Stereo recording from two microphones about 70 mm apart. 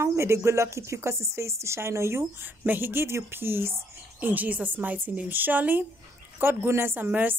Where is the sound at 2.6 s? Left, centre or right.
Right.